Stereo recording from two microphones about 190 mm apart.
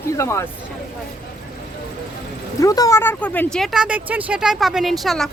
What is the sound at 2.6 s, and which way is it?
Speech, 20° left (ahead or behind).